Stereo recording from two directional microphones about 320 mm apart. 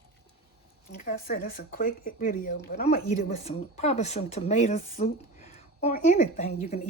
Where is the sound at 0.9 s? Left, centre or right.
Left.